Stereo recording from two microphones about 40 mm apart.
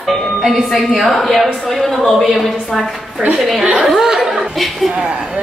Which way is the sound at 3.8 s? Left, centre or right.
Centre.